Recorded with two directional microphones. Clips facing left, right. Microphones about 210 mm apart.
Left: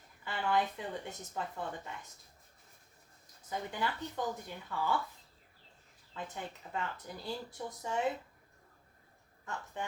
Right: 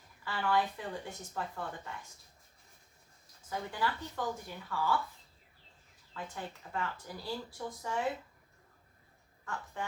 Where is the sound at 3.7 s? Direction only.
20° left (ahead or behind).